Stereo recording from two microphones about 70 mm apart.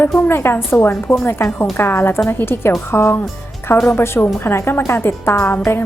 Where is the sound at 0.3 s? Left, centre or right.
Left.